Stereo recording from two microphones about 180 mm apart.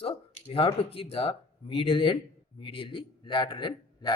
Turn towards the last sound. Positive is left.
turn(degrees=25)  # may be behind; listen again after turning